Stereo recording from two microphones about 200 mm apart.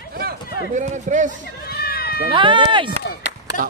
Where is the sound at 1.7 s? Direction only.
50° left (ahead or behind).